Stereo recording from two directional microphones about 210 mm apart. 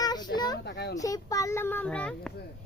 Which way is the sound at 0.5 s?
55° left (ahead or behind).